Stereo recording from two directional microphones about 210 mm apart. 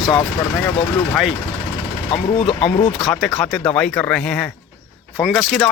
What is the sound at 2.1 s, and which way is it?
Speech, 25° left (ahead or behind).